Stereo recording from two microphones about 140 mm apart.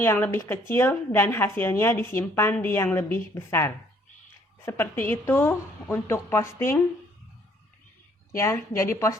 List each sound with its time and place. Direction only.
0.0 s a woman's voice: 15° left (ahead or behind)
8.4 s a woman's voice: 20° left (ahead or behind)